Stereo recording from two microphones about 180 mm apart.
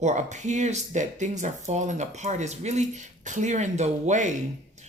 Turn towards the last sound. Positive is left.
turn(degrees=-40)  # may be behind; listen again after turning